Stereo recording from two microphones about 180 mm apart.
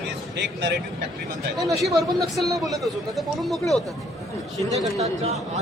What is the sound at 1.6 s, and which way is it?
Speech, centre (ahead or behind).